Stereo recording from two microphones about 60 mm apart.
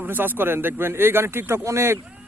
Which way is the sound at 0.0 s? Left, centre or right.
Right.